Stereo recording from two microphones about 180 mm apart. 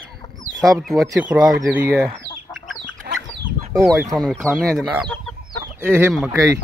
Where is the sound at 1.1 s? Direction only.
5° right (ahead or behind).